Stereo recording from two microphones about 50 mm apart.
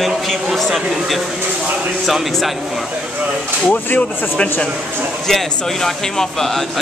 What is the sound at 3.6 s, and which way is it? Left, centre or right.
Speech, left.